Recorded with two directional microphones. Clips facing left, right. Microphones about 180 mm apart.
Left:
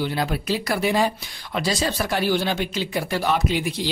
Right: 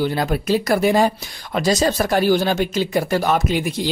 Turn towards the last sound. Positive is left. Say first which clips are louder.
# right 3 dB
turn(degrees=-45)  # may be behind; listen again after turning